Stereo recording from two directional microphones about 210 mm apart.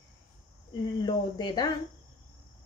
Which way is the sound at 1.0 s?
20° left (ahead or behind).